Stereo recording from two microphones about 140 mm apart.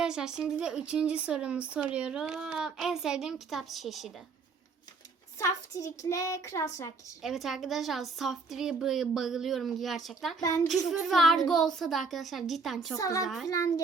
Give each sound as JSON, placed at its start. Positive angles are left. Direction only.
{"t": 0.0, "sound": "speech", "side_deg": -5}
{"t": 5.4, "sound": "a child's voice", "side_deg": 20}
{"t": 7.2, "sound": "speech", "side_deg": 0}
{"t": 13.0, "sound": "a child's voice", "side_deg": 25}
{"t": 13.2, "sound": "speech", "side_deg": 0}
{"t": 13.5, "sound": "a child's voice", "side_deg": 25}